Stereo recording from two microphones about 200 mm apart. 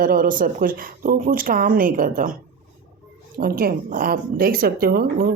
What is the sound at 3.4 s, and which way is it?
Speech, 45° right (ahead or behind).